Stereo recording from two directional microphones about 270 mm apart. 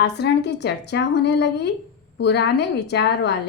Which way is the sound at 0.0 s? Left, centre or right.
Left.